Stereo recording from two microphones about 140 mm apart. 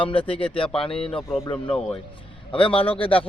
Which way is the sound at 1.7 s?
5° left (ahead or behind).